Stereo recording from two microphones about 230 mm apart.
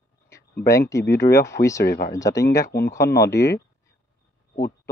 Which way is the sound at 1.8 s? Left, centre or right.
Left.